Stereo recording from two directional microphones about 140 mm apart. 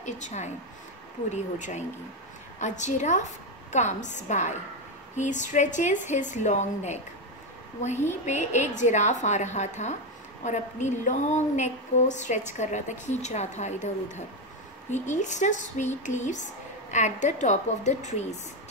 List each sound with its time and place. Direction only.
0.0 s a woman's voice: 55° left (ahead or behind)
8.3 s a woman's voice: 55° left (ahead or behind)